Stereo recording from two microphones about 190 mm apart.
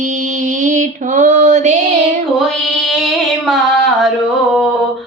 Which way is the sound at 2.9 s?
Centre (ahead or behind).